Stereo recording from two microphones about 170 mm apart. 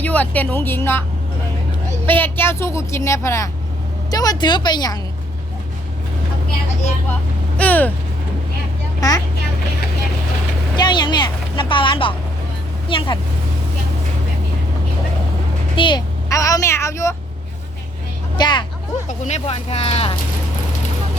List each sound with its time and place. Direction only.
0.0 s a woman's voice: 10° left (ahead or behind)
2.0 s a woman's voice: 10° left (ahead or behind)
7.6 s a woman's voice: 10° left (ahead or behind)
9.0 s speech: 20° left (ahead or behind)
10.8 s speech: 25° left (ahead or behind)
15.7 s speech: 30° left (ahead or behind)
18.3 s speech: 25° left (ahead or behind)
19.0 s speech: 45° left (ahead or behind)